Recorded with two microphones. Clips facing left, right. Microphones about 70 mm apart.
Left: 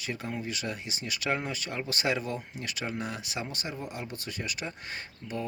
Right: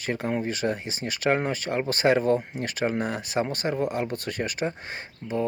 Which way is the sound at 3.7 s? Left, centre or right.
Right.